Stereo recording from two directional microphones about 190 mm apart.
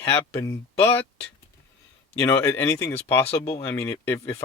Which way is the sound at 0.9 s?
30° left (ahead or behind).